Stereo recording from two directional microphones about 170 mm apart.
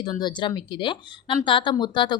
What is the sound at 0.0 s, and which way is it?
A woman's voice, 25° left (ahead or behind).